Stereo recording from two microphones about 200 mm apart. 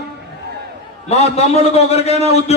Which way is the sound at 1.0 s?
30° left (ahead or behind).